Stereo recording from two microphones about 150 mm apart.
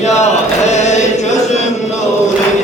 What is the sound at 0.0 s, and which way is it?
Chant, 50° left (ahead or behind).